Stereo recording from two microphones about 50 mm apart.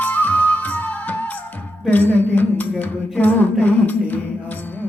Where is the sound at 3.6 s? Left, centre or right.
Left.